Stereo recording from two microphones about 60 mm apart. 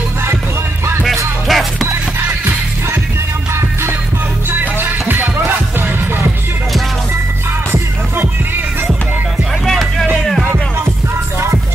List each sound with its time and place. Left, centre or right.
1.5 s music: centre
1.9 s music: right
4.5 s music: right
10.2 s music: centre